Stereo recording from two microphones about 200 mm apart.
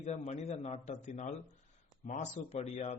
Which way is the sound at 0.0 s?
35° left (ahead or behind).